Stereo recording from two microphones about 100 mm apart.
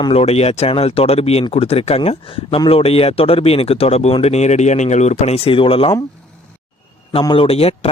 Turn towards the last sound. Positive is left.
turn(degrees=80)